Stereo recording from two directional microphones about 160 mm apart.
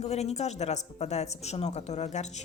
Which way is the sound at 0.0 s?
40° left (ahead or behind).